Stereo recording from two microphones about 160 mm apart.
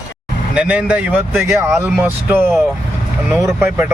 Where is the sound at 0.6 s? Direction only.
10° right (ahead or behind).